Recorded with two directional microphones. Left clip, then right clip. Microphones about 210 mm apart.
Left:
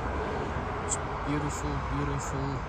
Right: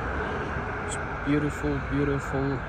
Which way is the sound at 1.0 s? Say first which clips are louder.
Right 4 dB; 35° left (ahead or behind).